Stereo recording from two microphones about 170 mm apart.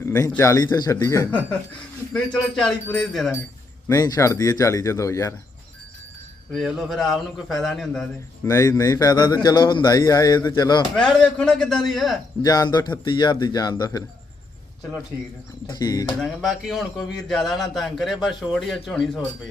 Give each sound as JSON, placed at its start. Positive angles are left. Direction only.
{"t": 0.0, "sound": "a man's voice", "side_deg": 15}
{"t": 3.8, "sound": "speech", "side_deg": 20}
{"t": 6.5, "sound": "a man's voice", "side_deg": 0}
{"t": 8.4, "sound": "speech", "side_deg": 20}
{"t": 10.9, "sound": "a man's voice", "side_deg": 5}
{"t": 12.4, "sound": "speech", "side_deg": 20}
{"t": 15.7, "sound": "speech", "side_deg": 25}
{"t": 16.2, "sound": "a man's voice", "side_deg": 0}